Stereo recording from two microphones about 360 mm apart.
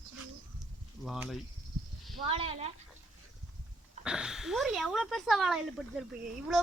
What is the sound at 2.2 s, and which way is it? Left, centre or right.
Speech, centre.